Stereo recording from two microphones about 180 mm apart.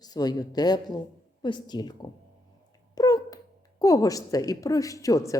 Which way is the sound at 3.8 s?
20° left (ahead or behind).